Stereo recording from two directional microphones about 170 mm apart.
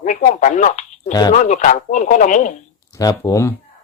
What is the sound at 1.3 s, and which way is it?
Speech, 45° left (ahead or behind).